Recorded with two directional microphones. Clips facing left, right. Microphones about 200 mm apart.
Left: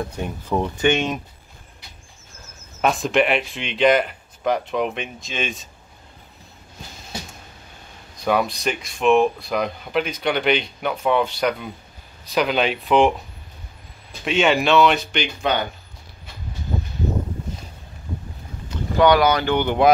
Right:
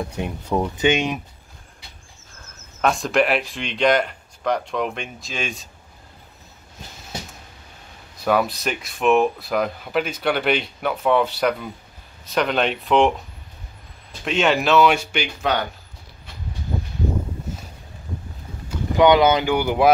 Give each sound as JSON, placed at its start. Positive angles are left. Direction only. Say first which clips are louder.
{"t": 0.1, "sound": "speech", "louder": "right 1 dB", "side_deg": -10}
{"t": 2.8, "sound": "speech", "louder": "even", "side_deg": 0}
{"t": 8.2, "sound": "speech", "louder": "right 1 dB", "side_deg": -5}
{"t": 14.2, "sound": "speech", "louder": "left 1 dB", "side_deg": 0}
{"t": 18.7, "sound": "speech", "louder": "right 1 dB", "side_deg": -20}
{"t": 19.5, "sound": "speech", "louder": "even", "side_deg": -5}